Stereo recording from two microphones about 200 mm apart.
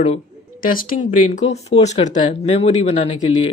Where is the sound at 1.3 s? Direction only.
35° left (ahead or behind).